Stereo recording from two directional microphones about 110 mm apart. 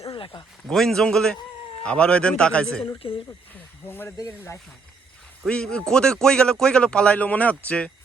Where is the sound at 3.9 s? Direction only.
20° left (ahead or behind).